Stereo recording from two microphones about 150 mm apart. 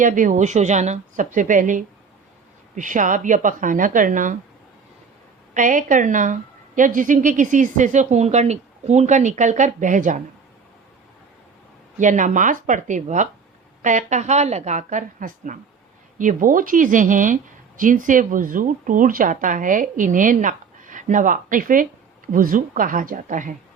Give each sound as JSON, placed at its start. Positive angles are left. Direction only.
{"t": 0.0, "sound": "a woman's voice", "side_deg": -60}
{"t": 5.5, "sound": "a woman's voice", "side_deg": -60}
{"t": 11.9, "sound": "a woman's voice", "side_deg": -55}